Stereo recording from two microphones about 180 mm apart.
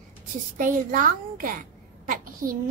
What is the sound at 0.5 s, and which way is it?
A child's voice, 50° right (ahead or behind).